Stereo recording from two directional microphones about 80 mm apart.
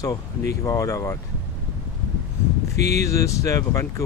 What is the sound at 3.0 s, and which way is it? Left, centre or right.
Speech, left.